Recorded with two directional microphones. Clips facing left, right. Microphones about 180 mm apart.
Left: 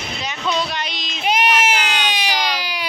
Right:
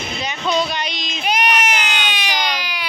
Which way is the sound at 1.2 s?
25° left (ahead or behind).